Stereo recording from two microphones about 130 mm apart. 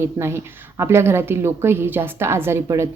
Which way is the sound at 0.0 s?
20° right (ahead or behind).